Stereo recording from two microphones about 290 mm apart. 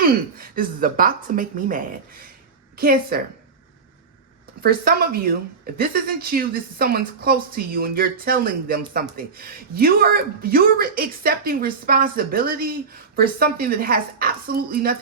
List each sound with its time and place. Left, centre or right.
0.0 s a woman's voice: right
4.6 s speech: right